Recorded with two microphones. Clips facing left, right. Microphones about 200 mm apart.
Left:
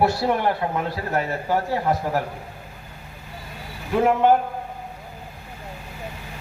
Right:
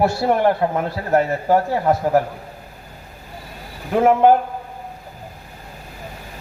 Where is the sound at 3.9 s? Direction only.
50° right (ahead or behind).